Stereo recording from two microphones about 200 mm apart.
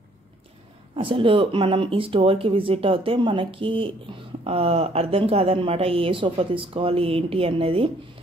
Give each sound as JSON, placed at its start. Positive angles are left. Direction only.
{"t": 0.9, "sound": "speech", "side_deg": -25}